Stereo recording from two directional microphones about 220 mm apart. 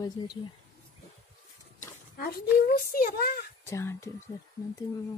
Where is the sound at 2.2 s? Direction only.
40° left (ahead or behind).